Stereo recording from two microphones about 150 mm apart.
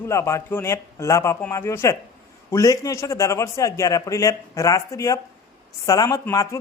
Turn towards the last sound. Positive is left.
turn(degrees=20)  # may be behind; listen again after turning